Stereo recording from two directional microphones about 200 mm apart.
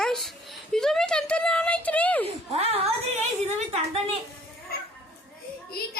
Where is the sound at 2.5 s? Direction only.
30° right (ahead or behind).